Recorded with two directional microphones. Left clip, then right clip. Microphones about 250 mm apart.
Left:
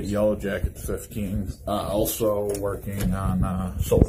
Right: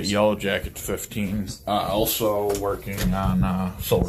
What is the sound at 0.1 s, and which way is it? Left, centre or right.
Speech, centre.